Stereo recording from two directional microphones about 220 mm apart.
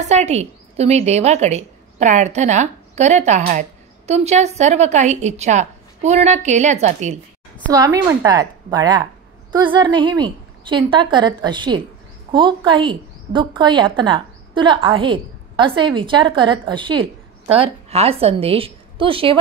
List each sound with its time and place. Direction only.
0.0 s a woman's voice: 30° right (ahead or behind)
7.7 s a woman's voice: 15° right (ahead or behind)